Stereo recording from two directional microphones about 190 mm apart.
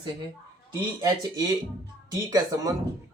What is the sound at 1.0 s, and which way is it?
Speech, 20° right (ahead or behind).